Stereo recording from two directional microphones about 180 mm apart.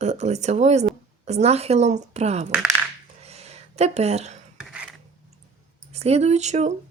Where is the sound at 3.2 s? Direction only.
35° right (ahead or behind).